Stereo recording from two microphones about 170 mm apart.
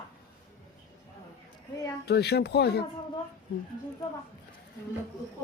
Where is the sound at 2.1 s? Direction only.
75° left (ahead or behind).